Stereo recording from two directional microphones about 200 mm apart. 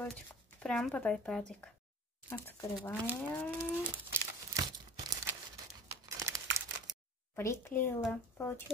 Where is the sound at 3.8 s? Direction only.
10° right (ahead or behind).